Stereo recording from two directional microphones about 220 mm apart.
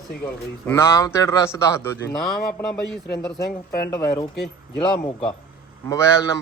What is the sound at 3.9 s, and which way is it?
Speech, 15° left (ahead or behind).